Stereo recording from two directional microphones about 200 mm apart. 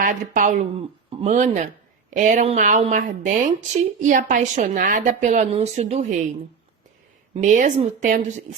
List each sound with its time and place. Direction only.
0.0 s speech: 40° right (ahead or behind)
7.3 s speech: 40° right (ahead or behind)